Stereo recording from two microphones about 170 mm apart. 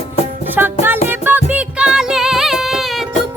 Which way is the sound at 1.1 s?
10° right (ahead or behind).